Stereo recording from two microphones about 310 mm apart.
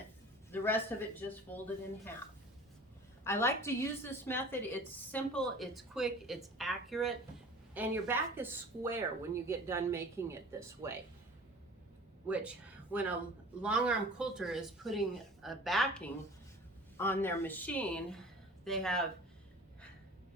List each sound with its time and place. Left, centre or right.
0.5 s speech: centre
3.2 s a woman's voice: centre
12.3 s a woman's voice: centre